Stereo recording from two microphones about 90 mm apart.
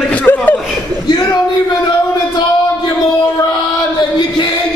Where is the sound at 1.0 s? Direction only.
45° left (ahead or behind).